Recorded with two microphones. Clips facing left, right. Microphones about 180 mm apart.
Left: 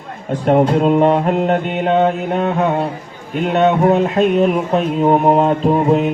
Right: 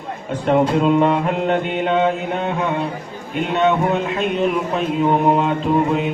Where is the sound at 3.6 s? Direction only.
40° left (ahead or behind).